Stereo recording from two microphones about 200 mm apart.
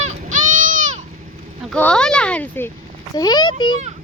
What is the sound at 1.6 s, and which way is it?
A child's voice, 5° left (ahead or behind).